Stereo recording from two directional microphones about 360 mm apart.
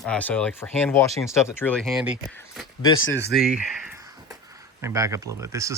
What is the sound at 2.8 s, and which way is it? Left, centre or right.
Speech, left.